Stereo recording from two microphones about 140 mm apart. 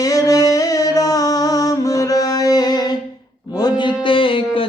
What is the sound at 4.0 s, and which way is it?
Music, 40° left (ahead or behind).